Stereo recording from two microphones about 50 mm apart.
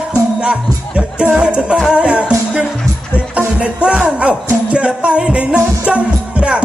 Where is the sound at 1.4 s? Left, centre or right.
Right.